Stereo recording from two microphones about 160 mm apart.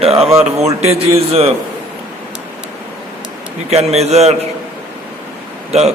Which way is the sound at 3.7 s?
40° right (ahead or behind).